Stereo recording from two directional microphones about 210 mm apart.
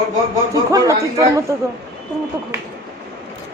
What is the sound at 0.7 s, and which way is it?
Speech, 15° right (ahead or behind).